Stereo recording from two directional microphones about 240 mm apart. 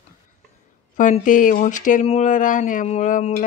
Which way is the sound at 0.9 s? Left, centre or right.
Left.